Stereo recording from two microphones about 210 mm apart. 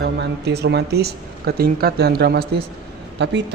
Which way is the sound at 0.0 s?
50° right (ahead or behind).